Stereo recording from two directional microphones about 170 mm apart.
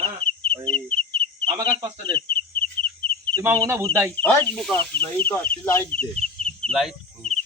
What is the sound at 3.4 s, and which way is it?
Speech, 15° right (ahead or behind).